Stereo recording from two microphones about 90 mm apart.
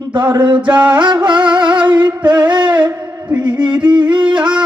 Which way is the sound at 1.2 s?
60° right (ahead or behind).